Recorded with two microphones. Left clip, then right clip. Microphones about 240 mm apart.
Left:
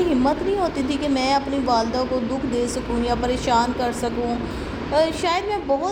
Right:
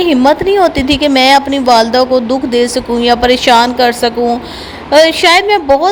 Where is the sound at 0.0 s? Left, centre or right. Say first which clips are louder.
Right 11 dB; right.